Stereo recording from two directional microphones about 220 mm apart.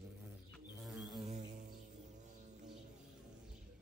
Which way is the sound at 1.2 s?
20° right (ahead or behind).